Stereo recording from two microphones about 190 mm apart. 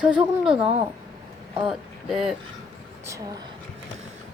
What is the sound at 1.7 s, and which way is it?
Speech, centre (ahead or behind).